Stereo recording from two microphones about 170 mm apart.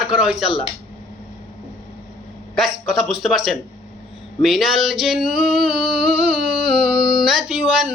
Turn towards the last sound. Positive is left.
turn(degrees=-5)  # may be behind; listen again after turning